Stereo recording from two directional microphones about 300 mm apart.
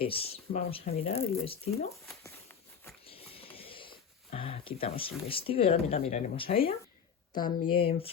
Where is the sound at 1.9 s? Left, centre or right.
Centre.